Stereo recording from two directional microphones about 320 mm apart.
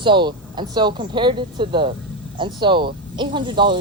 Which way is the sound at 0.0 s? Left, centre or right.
Centre.